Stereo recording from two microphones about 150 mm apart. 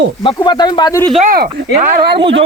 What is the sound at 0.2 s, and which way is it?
Speech, 30° left (ahead or behind).